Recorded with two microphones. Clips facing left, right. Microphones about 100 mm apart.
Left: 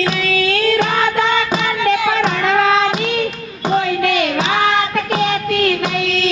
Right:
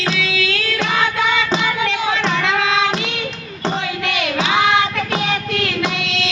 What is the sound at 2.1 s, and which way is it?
Music, 45° left (ahead or behind).